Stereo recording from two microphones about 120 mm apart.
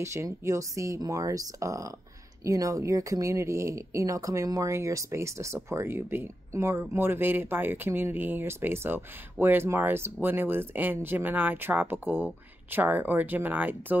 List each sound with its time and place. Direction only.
0.0 s speech: 25° right (ahead or behind)